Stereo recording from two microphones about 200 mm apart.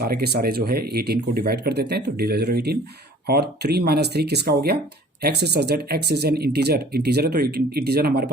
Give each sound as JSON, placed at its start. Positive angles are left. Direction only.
{"t": 0.0, "sound": "speech", "side_deg": -50}